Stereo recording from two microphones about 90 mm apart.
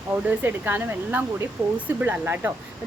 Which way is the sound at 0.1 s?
20° right (ahead or behind).